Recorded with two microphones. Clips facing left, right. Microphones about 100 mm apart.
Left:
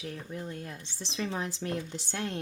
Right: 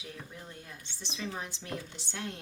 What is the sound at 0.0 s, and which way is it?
Speech, 55° left (ahead or behind).